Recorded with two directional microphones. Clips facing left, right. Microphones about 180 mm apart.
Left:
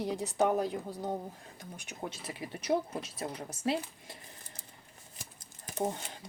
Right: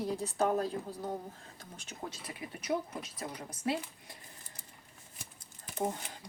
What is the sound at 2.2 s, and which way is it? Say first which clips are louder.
Speech: left 3 dB; 25° left (ahead or behind).